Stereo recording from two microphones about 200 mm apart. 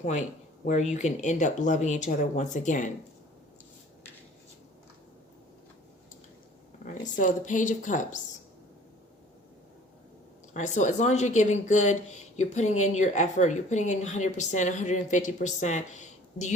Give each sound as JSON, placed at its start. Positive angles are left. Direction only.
{"t": 0.0, "sound": "speech", "side_deg": 35}
{"t": 6.8, "sound": "speech", "side_deg": 40}
{"t": 10.5, "sound": "speech", "side_deg": 40}